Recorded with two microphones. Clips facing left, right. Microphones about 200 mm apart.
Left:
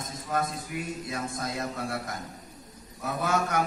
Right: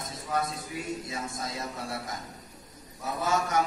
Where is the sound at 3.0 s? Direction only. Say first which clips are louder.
Left 1 dB; 60° left (ahead or behind).